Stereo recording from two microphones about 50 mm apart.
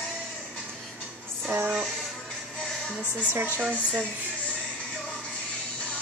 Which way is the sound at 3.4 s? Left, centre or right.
Right.